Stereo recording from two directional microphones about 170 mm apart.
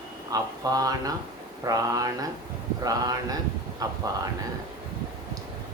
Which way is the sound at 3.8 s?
20° right (ahead or behind).